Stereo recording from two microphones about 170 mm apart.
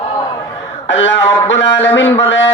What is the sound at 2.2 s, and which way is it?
Speech, 90° left.